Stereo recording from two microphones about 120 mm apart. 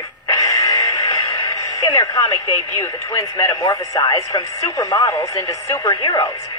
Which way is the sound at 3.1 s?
30° left (ahead or behind).